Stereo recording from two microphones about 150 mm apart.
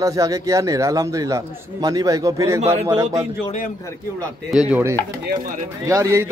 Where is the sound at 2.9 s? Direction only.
25° right (ahead or behind).